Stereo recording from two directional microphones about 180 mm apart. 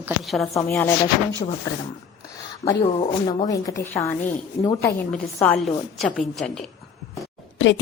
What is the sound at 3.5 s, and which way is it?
A woman's voice, 20° left (ahead or behind).